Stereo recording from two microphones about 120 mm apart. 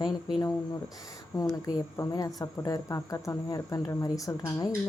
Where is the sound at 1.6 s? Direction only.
30° left (ahead or behind).